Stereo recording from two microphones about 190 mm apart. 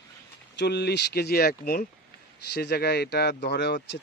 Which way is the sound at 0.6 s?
60° left (ahead or behind).